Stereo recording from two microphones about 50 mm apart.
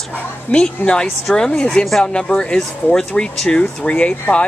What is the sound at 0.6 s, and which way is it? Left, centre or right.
Speech, centre.